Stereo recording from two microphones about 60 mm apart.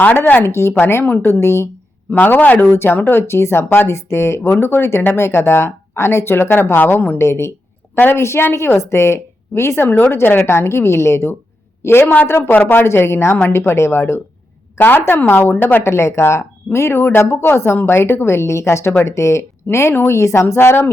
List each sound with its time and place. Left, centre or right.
0.4 s speech: left
2.0 s a man's voice: left
2.7 s speech: left
7.2 s speech: left
9.8 s a man's voice: left
10.1 s a woman's voice: left
14.8 s a woman's voice: left